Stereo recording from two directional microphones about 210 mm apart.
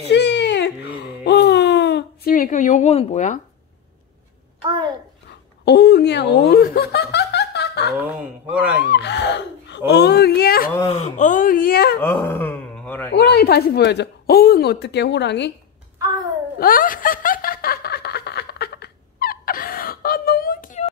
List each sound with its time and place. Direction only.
0.1 s whimper: 55° left (ahead or behind); by 3.3 s 35° left (ahead or behind)
4.6 s a child's voice: 20° right (ahead or behind)
5.7 s speech: 50° left (ahead or behind)
8.9 s speech: 55° left (ahead or behind)
10.9 s speech: 35° left (ahead or behind)
12.0 s a man's voice: 10° left (ahead or behind)
13.1 s speech: 50° left (ahead or behind)
16.5 s snicker: 45° left (ahead or behind)